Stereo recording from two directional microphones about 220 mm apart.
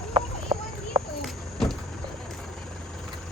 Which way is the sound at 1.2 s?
Centre (ahead or behind).